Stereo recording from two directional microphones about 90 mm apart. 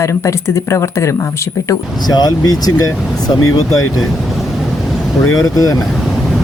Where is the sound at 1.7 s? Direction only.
50° left (ahead or behind).